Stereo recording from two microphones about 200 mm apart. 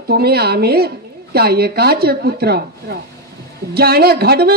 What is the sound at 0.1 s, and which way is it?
Speech, 55° right (ahead or behind).